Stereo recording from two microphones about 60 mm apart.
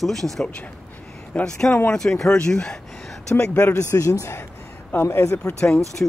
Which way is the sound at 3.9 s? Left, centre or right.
Left.